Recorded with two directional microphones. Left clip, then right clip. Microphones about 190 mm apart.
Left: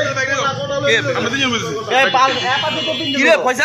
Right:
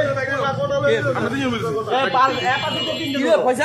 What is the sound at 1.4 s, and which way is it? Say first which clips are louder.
A man's voice: left 4 dB; 20° left (ahead or behind).